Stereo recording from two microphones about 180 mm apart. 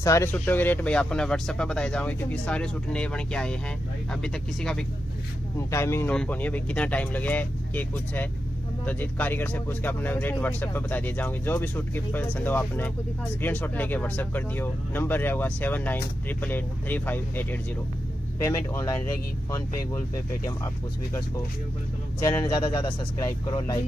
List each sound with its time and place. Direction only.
0.0 s speech: 15° left (ahead or behind)
5.7 s speech: 15° left (ahead or behind)
22.2 s speech: 20° left (ahead or behind)